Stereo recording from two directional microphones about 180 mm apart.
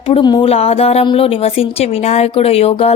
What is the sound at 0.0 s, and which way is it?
A woman's voice, 30° left (ahead or behind).